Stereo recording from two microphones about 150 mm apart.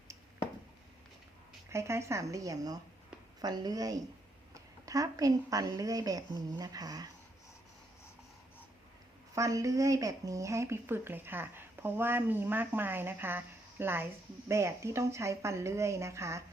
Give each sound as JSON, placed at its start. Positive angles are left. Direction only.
{"t": 1.7, "sound": "speech", "side_deg": -20}
{"t": 9.3, "sound": "speech", "side_deg": -20}